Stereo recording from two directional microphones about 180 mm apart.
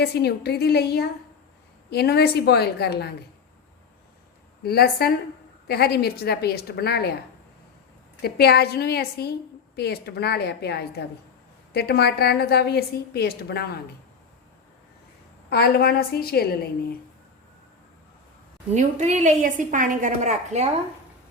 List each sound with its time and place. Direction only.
0.0 s a woman's voice: 65° left (ahead or behind)
4.6 s a woman's voice: 60° left (ahead or behind)
8.2 s a woman's voice: 60° left (ahead or behind)
15.4 s a woman's voice: 60° left (ahead or behind)
18.7 s a woman's voice: 40° right (ahead or behind)